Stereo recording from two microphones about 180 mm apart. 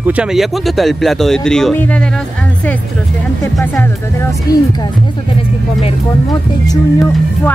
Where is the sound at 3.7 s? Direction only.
15° left (ahead or behind).